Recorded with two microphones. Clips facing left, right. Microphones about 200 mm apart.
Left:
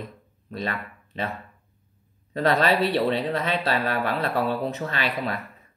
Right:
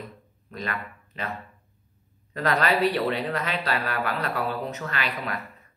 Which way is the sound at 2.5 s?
30° left (ahead or behind).